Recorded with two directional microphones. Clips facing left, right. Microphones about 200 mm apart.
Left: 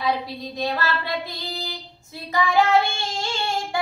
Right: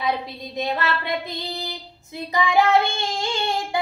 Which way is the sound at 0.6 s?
20° right (ahead or behind).